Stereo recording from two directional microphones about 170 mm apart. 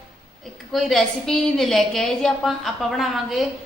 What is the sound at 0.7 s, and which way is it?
A woman's voice, centre (ahead or behind).